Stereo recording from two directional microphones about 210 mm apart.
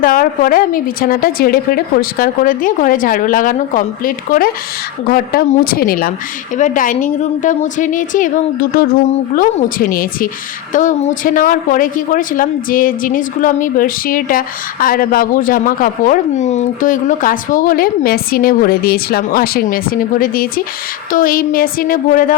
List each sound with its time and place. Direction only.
0.0 s a woman's voice: 40° left (ahead or behind)